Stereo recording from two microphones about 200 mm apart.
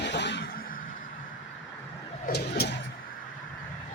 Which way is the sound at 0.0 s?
60° left (ahead or behind).